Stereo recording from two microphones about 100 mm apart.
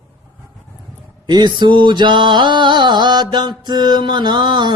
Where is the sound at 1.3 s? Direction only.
50° right (ahead or behind).